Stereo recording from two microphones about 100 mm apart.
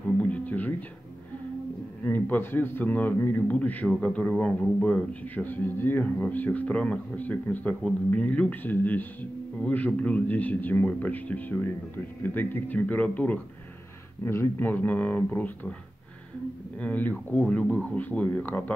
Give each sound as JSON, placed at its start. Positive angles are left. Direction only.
{"t": 0.2, "sound": "music", "side_deg": 15}
{"t": 2.0, "sound": "a man's voice", "side_deg": 20}
{"t": 16.7, "sound": "a man's voice", "side_deg": 15}